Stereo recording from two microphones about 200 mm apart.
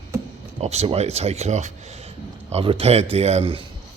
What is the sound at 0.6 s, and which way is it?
Speech, 35° right (ahead or behind).